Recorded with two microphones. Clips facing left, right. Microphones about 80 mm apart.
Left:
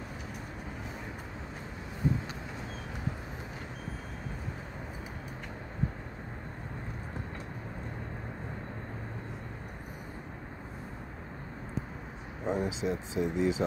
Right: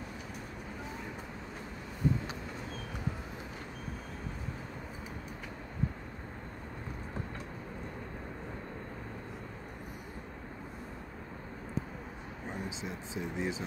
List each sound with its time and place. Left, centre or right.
12.4 s speech: left